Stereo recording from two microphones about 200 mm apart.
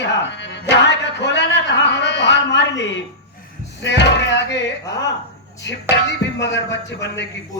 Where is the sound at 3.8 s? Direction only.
60° left (ahead or behind).